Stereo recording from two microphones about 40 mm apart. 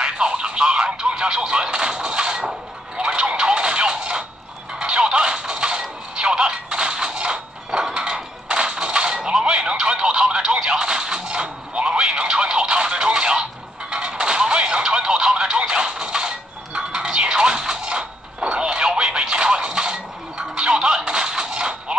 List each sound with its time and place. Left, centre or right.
0.0 s a sound: right
1.0 s speech: right
3.0 s music: right